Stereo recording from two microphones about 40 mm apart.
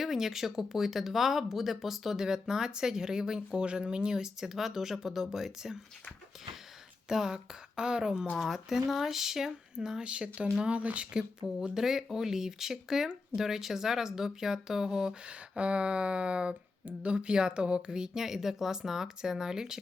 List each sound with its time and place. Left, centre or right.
0.0 s speech: centre
7.1 s speech: centre
8.4 s speech: centre
10.0 s speech: right
11.1 s speech: centre
15.3 s speech: right